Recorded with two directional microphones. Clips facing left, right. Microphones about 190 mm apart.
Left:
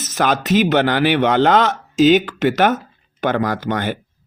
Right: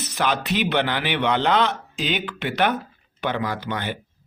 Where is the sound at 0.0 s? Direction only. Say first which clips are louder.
Left 5 dB; 45° left (ahead or behind).